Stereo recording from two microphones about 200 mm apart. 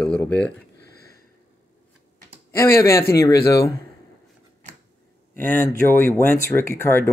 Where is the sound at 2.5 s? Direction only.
15° left (ahead or behind).